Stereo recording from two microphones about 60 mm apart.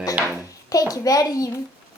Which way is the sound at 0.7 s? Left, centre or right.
Left.